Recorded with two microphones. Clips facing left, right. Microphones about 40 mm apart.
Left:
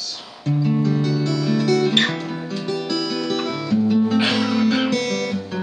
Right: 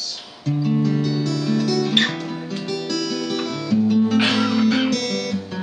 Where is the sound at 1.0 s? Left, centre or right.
Left.